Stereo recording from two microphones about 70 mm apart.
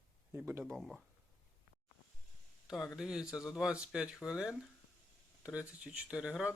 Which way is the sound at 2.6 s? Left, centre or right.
Centre.